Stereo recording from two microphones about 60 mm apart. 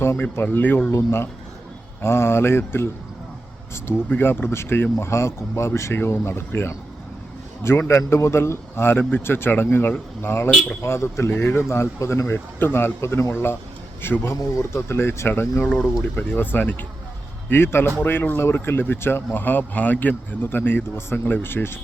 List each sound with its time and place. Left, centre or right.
0.3 s speech: left
0.9 s speech: left
4.1 s speech: left
5.9 s speech: left
15.7 s speech: centre
16.1 s speech: left